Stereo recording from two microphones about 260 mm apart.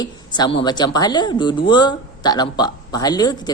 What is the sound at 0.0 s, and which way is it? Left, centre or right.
Speech, centre.